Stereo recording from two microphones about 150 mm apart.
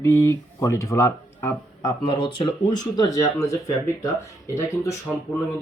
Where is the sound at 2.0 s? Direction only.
30° left (ahead or behind).